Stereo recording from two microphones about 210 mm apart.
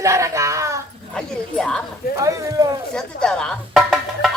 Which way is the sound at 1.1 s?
5° left (ahead or behind).